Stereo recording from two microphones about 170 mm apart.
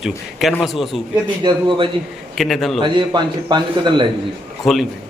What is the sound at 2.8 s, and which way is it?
A man's voice, 25° right (ahead or behind).